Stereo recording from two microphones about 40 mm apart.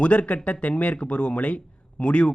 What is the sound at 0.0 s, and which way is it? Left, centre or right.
Speech, left.